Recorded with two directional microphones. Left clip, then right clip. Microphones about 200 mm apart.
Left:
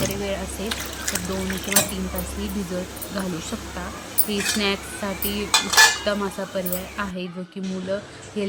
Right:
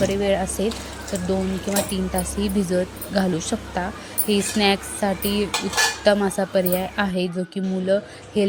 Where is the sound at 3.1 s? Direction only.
20° right (ahead or behind).